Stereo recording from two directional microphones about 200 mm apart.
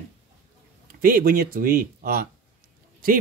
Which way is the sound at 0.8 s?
45° right (ahead or behind).